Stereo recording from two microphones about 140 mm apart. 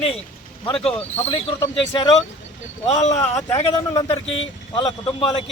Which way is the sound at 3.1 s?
25° left (ahead or behind).